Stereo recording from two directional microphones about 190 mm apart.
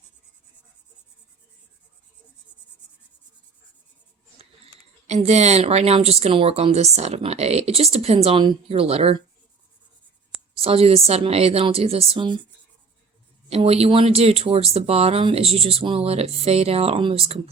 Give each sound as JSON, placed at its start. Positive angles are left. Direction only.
{"t": 4.4, "sound": "speech", "side_deg": -35}
{"t": 10.5, "sound": "speech", "side_deg": -30}
{"t": 13.5, "sound": "speech", "side_deg": -30}